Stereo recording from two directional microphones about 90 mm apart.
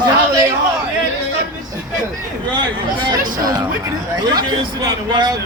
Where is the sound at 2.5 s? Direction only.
60° right (ahead or behind).